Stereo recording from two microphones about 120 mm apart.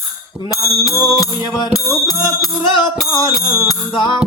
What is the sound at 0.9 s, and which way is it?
Music, 30° left (ahead or behind).